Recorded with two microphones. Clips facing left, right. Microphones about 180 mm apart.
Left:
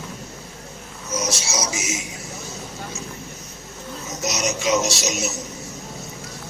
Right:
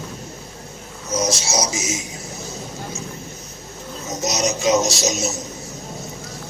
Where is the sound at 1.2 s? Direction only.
40° right (ahead or behind).